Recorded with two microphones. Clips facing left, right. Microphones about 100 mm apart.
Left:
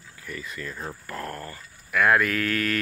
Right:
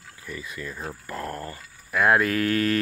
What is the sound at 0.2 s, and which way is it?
Speech, 20° right (ahead or behind).